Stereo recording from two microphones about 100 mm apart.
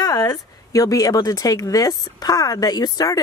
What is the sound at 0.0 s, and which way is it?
Speech, 40° left (ahead or behind).